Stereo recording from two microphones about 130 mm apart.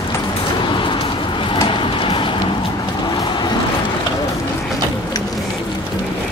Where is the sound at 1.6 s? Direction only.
40° left (ahead or behind).